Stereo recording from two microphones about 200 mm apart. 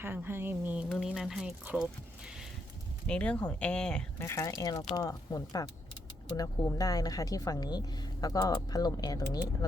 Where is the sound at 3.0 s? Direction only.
5° left (ahead or behind).